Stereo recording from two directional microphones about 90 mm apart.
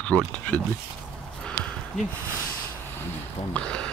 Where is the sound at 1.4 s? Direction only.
5° left (ahead or behind).